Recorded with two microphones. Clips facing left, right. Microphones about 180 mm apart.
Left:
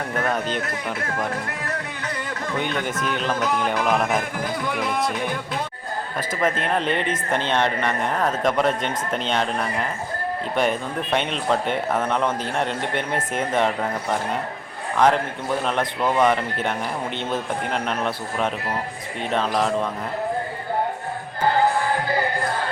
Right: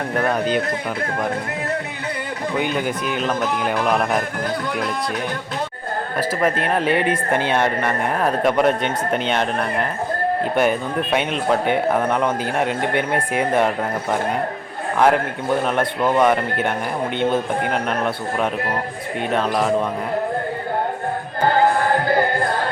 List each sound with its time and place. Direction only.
0.3 s speech: centre (ahead or behind)
2.6 s speech: 5° right (ahead or behind)
6.1 s speech: 5° right (ahead or behind)
10.5 s speech: 5° right (ahead or behind)
21.4 s music: 55° right (ahead or behind)